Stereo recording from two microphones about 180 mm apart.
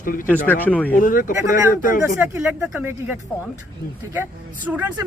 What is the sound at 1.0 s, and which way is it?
A man's voice, 50° left (ahead or behind).